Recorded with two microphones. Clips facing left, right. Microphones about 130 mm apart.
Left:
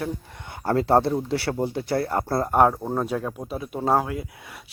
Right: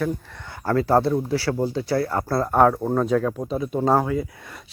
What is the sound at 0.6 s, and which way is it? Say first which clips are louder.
Speech: right 1 dB; 25° left (ahead or behind).